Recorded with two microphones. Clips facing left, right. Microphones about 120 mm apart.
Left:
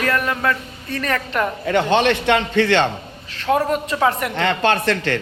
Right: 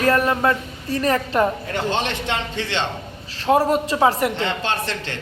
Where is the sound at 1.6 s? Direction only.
70° left (ahead or behind).